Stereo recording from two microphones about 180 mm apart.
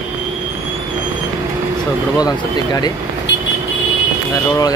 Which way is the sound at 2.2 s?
20° left (ahead or behind).